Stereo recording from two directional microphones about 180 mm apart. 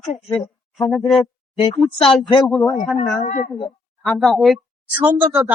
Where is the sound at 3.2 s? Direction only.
40° left (ahead or behind).